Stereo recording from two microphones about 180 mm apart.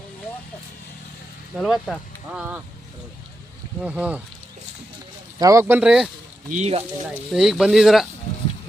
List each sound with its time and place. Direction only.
1.5 s speech: centre (ahead or behind)
3.8 s speech: 5° right (ahead or behind)
5.4 s speech: 20° right (ahead or behind)
6.5 s speech: 35° right (ahead or behind)
7.3 s speech: centre (ahead or behind)